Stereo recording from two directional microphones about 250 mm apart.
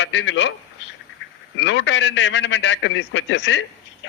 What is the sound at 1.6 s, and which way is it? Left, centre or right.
A man's voice, left.